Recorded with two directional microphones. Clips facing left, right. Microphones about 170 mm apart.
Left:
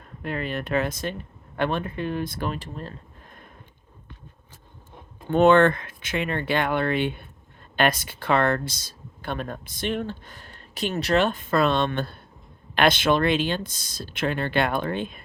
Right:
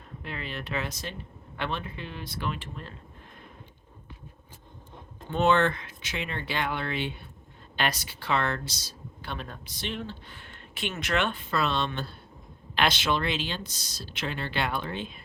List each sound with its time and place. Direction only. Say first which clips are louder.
0.2 s speech: left 9 dB; 50° left (ahead or behind)
5.3 s speech: left 7 dB; 55° left (ahead or behind)